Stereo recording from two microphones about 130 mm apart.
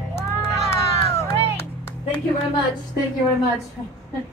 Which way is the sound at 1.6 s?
20° left (ahead or behind).